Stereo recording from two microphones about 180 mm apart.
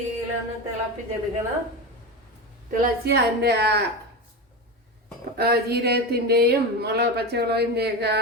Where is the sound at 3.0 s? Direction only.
65° right (ahead or behind).